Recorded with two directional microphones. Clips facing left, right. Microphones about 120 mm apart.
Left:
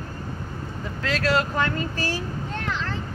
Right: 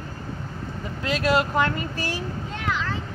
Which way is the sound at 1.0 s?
15° right (ahead or behind).